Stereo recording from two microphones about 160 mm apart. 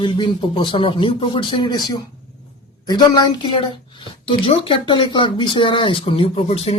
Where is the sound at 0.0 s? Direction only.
30° left (ahead or behind).